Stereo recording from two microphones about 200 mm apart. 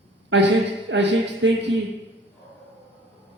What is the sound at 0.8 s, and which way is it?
Speech, 65° right (ahead or behind).